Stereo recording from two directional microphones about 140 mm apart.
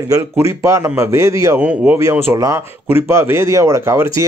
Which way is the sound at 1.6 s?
10° right (ahead or behind).